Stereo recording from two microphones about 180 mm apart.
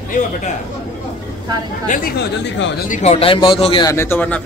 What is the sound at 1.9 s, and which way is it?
Speech, 55° left (ahead or behind).